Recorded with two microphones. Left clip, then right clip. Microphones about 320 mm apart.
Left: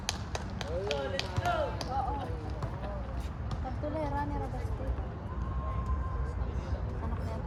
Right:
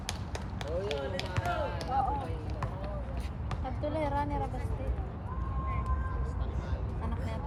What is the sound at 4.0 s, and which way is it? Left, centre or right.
Music, right.